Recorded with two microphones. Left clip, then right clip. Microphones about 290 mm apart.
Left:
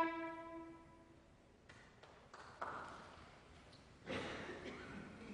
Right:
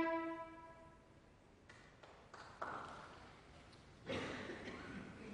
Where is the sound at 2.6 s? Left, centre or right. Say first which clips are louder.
Even; left.